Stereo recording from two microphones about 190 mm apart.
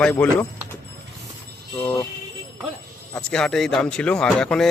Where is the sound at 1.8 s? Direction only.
10° left (ahead or behind).